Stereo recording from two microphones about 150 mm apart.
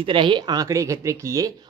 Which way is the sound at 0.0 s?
35° right (ahead or behind).